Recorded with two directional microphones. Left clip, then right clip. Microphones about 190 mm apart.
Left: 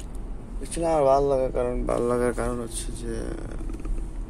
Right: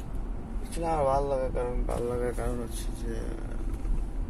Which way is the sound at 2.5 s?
30° left (ahead or behind).